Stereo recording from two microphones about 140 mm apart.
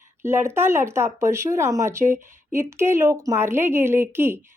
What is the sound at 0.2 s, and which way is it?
A woman's voice, 20° right (ahead or behind).